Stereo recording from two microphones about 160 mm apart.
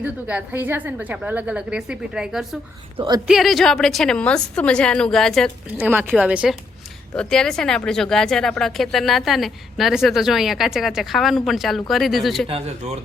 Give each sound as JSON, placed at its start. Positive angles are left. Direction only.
{"t": 0.0, "sound": "a woman's voice", "side_deg": -10}
{"t": 5.7, "sound": "a woman's voice", "side_deg": -10}
{"t": 7.2, "sound": "speech", "side_deg": 5}
{"t": 12.5, "sound": "speech", "side_deg": -40}